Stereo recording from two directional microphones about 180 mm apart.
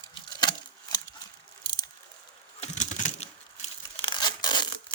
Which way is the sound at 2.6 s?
40° left (ahead or behind).